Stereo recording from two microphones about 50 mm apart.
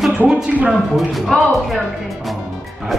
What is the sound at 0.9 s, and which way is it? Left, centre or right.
Speech, centre.